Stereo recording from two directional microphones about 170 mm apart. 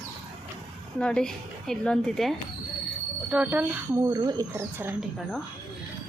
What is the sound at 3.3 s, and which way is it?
Speech, 10° right (ahead or behind).